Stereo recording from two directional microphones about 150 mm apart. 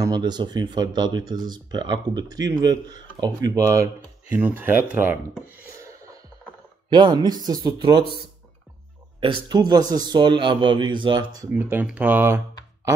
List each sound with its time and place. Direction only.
0.0 s speech: 30° right (ahead or behind)
6.9 s speech: 30° right (ahead or behind)
9.2 s a man's voice: 30° right (ahead or behind)
11.5 s speech: 10° right (ahead or behind)